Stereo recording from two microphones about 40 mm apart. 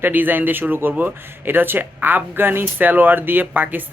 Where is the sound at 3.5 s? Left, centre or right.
Right.